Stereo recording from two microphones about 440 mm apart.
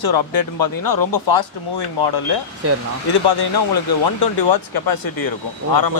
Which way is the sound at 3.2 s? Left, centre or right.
Left.